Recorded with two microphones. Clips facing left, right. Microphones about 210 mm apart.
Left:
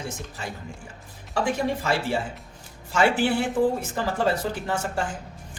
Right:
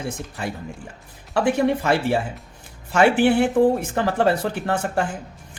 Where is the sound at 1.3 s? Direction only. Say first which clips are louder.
Right 6 dB; 60° right (ahead or behind).